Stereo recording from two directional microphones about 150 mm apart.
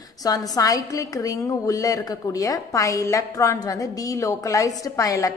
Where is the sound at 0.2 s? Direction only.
25° left (ahead or behind).